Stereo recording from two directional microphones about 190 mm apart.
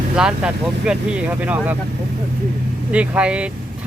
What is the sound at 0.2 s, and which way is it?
Speech, 5° right (ahead or behind).